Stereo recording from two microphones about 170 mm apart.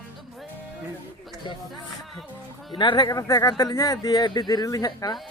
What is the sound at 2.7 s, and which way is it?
Speech, 30° left (ahead or behind).